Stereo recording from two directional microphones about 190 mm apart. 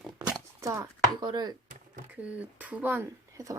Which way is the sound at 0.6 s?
15° right (ahead or behind).